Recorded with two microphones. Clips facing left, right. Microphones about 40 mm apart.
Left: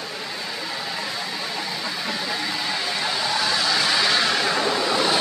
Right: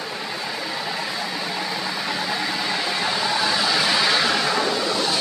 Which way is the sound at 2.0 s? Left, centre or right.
Centre.